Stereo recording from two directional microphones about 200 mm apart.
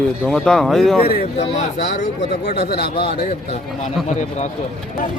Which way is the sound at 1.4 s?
35° left (ahead or behind).